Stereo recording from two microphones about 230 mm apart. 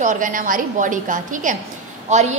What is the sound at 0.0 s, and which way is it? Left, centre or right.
A woman's voice, right.